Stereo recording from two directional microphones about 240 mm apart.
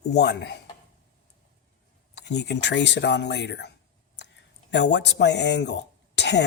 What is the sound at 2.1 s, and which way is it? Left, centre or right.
Speech, left.